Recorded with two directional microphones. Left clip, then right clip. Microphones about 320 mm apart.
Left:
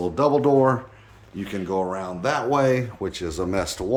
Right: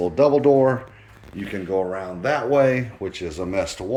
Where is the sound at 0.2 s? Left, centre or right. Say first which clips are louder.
Right 3 dB; left.